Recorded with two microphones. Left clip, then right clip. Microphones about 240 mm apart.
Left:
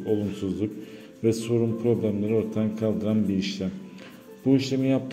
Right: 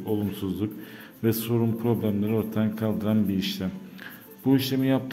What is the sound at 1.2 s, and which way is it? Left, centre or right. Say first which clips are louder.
A man's voice: left 2 dB; centre.